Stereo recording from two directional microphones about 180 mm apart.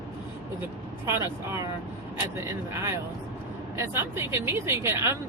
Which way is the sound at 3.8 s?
15° right (ahead or behind).